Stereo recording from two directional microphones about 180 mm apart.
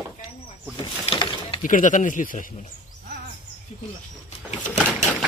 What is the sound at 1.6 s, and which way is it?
Speech, 45° left (ahead or behind).